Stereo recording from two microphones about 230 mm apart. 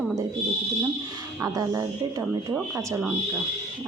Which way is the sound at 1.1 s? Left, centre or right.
Centre.